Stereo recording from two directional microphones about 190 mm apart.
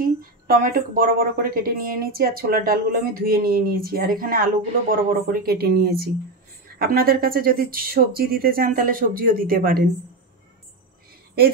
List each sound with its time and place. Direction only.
0.0 s speech: 50° right (ahead or behind)